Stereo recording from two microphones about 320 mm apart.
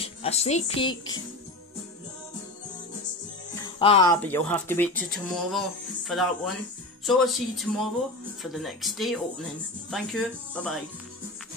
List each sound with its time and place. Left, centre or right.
0.0 s speech: centre
3.5 s speech: centre